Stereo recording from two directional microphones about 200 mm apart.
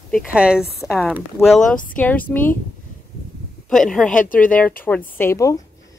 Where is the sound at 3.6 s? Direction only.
5° left (ahead or behind).